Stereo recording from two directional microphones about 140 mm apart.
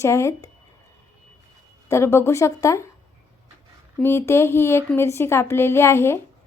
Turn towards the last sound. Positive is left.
turn(degrees=20)  # may be behind; listen again after turning